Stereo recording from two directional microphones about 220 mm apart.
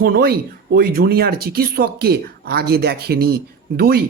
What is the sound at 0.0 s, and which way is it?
Speech, 45° right (ahead or behind).